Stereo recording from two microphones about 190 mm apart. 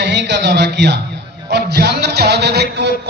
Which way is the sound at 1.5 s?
60° right (ahead or behind).